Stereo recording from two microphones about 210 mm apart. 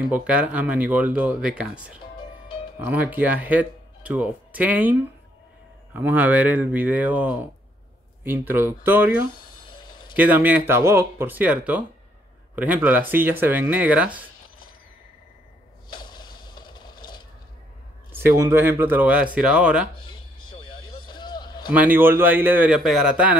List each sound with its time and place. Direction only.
0.1 s speech: 5° right (ahead or behind)
5.9 s speech: 10° right (ahead or behind)
9.3 s a sound: 20° left (ahead or behind)
10.1 s speech: 10° right (ahead or behind)
15.9 s mechanisms: 20° left (ahead or behind)
18.1 s speech: 10° right (ahead or behind)
20.1 s a sound: 20° left (ahead or behind)
21.6 s speech: 10° right (ahead or behind)